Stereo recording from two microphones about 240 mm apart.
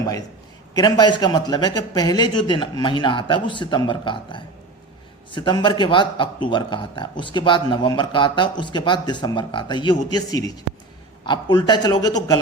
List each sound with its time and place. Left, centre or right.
0.7 s a man's voice: centre